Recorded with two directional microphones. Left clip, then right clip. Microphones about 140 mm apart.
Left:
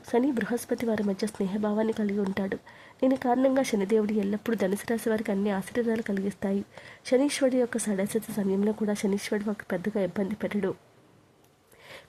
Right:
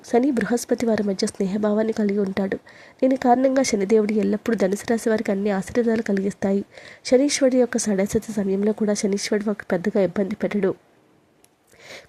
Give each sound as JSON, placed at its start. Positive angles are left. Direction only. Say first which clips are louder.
{"t": 0.1, "sound": "a woman's voice", "louder": "right 6 dB", "side_deg": -30}